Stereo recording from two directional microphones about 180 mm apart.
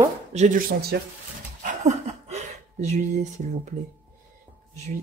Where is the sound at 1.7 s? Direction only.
40° right (ahead or behind).